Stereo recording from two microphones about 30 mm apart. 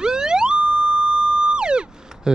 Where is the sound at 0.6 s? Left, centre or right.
Right.